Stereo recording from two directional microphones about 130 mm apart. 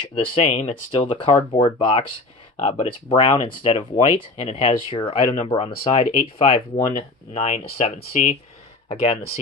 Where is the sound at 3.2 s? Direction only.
45° left (ahead or behind).